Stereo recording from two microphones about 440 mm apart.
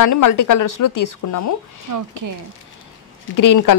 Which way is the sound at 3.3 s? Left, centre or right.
Left.